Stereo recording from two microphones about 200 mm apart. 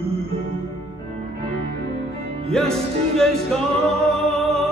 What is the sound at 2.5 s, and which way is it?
Music, centre (ahead or behind).